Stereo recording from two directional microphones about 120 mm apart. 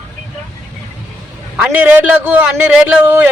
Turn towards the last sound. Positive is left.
turn(degrees=-15)  # may be behind; listen again after turning